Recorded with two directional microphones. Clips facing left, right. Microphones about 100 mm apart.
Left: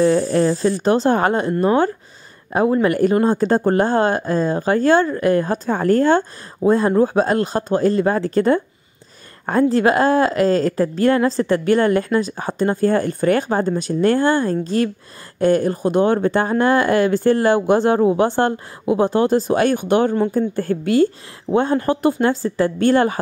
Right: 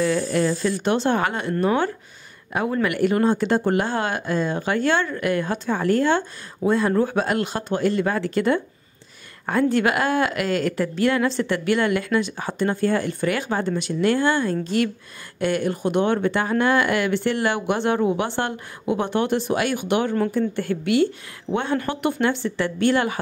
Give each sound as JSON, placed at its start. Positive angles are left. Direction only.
{"t": 0.0, "sound": "a woman's voice", "side_deg": 35}